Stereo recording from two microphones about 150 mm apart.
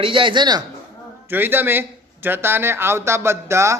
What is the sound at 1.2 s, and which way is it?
A man's voice, 15° right (ahead or behind).